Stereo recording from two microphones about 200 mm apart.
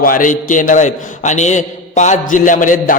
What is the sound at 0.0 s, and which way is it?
A man's voice, 45° left (ahead or behind).